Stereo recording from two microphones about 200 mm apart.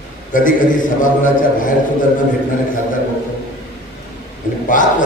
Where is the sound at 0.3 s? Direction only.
40° left (ahead or behind).